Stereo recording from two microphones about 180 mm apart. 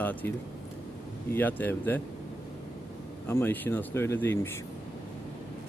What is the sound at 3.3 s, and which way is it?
Speech, 10° left (ahead or behind).